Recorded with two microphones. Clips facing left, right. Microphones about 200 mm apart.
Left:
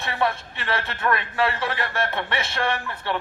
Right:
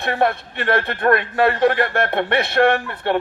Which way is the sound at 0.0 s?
55° right (ahead or behind).